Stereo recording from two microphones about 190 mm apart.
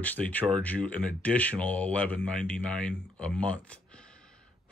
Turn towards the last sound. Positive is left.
turn(degrees=5)  # may be behind; listen again after turning